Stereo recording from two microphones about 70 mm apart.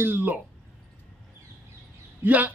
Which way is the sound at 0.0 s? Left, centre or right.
Right.